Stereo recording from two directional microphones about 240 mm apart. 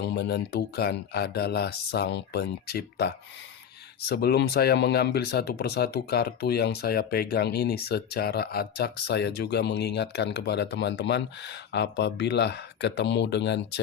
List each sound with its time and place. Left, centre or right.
0.0 s speech: left